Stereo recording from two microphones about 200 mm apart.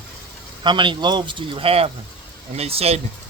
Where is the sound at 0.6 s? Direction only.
25° right (ahead or behind).